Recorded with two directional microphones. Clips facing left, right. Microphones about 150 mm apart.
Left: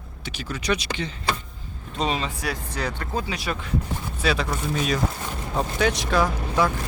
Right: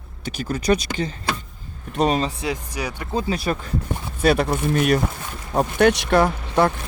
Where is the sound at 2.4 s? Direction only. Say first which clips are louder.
Right 2 dB; 15° right (ahead or behind).